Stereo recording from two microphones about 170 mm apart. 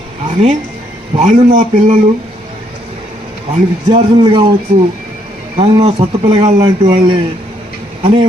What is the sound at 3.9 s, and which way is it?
Speech, 25° right (ahead or behind).